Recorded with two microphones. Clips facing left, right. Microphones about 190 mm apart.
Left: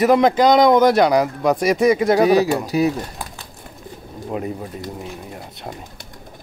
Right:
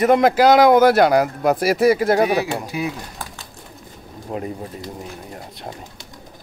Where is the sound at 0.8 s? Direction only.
60° right (ahead or behind).